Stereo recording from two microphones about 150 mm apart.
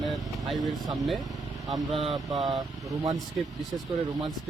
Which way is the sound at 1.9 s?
40° right (ahead or behind).